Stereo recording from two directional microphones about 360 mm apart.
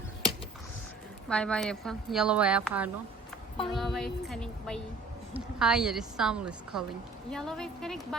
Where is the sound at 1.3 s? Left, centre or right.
Centre.